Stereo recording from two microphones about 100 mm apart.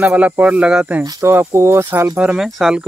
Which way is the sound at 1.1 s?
35° right (ahead or behind).